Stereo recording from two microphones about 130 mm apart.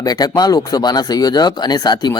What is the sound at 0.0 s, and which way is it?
A man's voice, 30° left (ahead or behind).